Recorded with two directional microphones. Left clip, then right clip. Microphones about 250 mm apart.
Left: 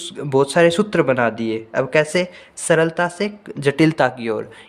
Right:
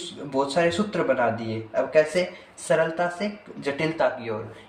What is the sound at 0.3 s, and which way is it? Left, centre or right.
Speech, left.